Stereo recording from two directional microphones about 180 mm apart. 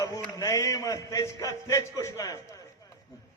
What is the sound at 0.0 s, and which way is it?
A man's voice, 15° left (ahead or behind).